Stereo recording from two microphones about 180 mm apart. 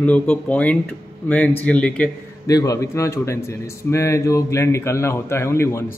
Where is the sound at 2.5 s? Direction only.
20° left (ahead or behind).